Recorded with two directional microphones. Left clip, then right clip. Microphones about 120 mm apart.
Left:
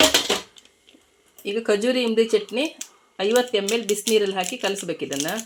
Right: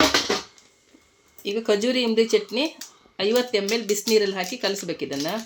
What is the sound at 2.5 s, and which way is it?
Speech, 10° right (ahead or behind).